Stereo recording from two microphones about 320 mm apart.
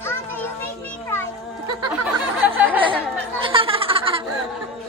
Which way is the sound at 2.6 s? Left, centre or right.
Centre.